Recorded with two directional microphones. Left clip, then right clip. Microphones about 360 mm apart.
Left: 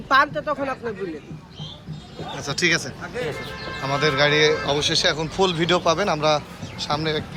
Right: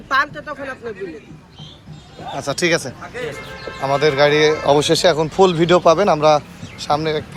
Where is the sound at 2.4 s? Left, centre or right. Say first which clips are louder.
Right 3 dB; centre.